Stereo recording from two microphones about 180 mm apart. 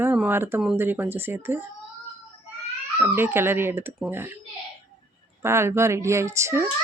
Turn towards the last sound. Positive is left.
turn(degrees=-15)  # may be behind; listen again after turning